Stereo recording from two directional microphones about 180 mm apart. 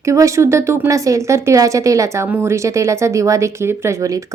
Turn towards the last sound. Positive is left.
turn(degrees=-15)  # may be behind; listen again after turning